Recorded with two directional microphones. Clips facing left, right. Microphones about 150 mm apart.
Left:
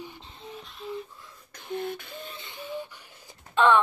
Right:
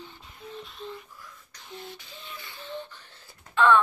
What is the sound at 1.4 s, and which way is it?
Beatboxing, 55° left (ahead or behind).